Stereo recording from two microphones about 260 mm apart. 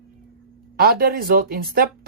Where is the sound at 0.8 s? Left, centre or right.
Right.